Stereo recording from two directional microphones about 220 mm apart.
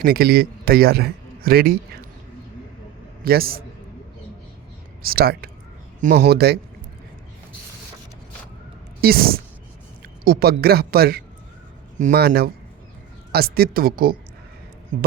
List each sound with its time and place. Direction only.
0.0 s a man's voice: 45° right (ahead or behind)
3.2 s speech: 45° right (ahead or behind)
5.0 s speech: 45° right (ahead or behind)
9.0 s a woman's voice: 45° right (ahead or behind)